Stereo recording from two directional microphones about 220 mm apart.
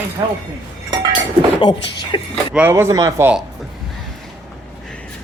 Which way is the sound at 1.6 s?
20° left (ahead or behind).